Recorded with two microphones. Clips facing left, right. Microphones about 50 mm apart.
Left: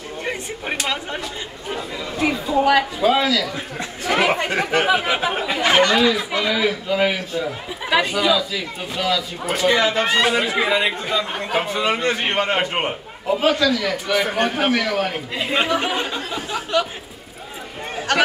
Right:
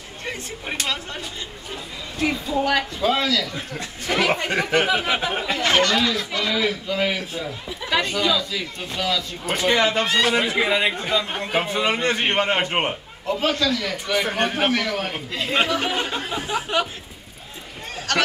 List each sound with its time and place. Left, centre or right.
0.2 s speech: centre
2.1 s speech: centre
10.0 s speech: centre
10.3 s speech: centre
16.1 s speech: centre
17.9 s a sound: centre